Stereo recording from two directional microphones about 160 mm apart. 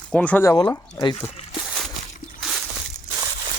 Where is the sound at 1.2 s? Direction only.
5° right (ahead or behind).